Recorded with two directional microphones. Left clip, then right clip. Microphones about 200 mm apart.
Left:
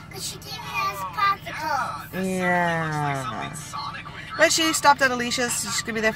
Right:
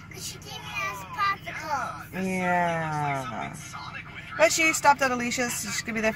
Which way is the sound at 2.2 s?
5° right (ahead or behind).